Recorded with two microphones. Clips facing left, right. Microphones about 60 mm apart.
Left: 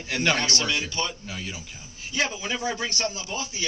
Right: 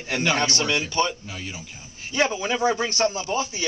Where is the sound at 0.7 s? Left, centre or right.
Right.